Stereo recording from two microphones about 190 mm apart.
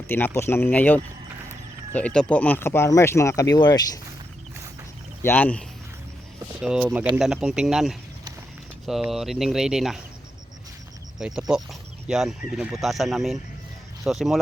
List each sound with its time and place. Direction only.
0.1 s speech: 10° left (ahead or behind)
5.2 s speech: 10° left (ahead or behind)
6.6 s speech: 5° right (ahead or behind)
11.2 s speech: 5° right (ahead or behind)